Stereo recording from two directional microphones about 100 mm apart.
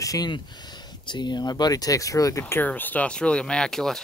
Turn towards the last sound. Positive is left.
turn(degrees=5)  # may be behind; listen again after turning